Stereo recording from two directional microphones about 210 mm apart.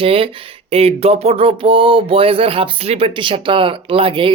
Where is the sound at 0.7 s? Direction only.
30° right (ahead or behind).